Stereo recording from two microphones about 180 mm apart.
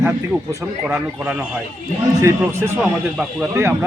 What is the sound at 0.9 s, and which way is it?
A man's voice, 10° right (ahead or behind).